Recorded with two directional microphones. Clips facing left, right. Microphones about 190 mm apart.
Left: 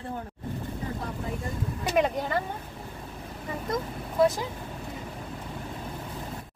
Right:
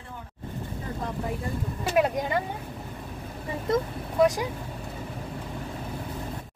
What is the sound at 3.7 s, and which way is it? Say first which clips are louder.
Speech: right 3 dB; 15° right (ahead or behind).